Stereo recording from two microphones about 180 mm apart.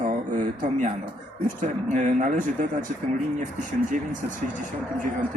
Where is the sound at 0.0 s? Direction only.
45° right (ahead or behind).